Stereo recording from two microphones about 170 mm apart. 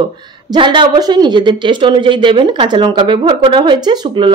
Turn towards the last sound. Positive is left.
turn(degrees=-25)  # may be behind; listen again after turning